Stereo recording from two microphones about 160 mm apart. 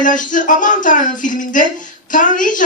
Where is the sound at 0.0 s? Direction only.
55° left (ahead or behind).